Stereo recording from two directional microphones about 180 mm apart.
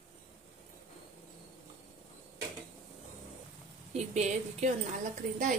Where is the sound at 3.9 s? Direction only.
40° right (ahead or behind).